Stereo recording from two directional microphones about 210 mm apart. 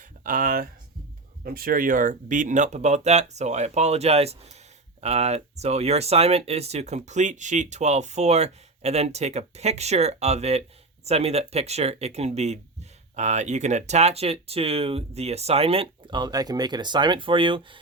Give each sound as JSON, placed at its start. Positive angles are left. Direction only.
{"t": 0.3, "sound": "speech", "side_deg": -40}